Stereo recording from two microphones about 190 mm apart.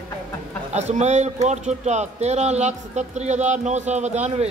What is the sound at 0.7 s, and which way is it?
A man's voice, 35° right (ahead or behind).